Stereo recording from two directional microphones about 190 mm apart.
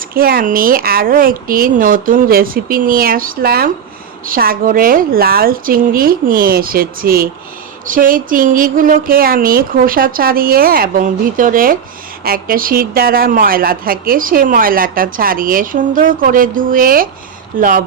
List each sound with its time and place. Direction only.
0.1 s speech: 50° right (ahead or behind)